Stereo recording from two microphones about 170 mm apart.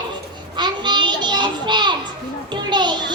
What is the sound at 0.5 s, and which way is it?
Child singing, 25° right (ahead or behind).